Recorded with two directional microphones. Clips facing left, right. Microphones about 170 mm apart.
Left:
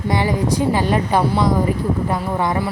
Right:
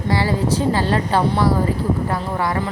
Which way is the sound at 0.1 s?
15° left (ahead or behind).